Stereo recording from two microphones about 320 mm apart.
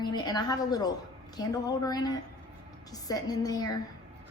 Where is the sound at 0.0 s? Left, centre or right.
Centre.